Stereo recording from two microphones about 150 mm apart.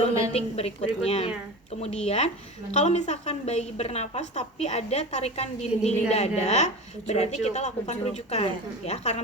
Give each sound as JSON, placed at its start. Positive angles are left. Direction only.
{"t": 0.3, "sound": "a woman's voice", "side_deg": 45}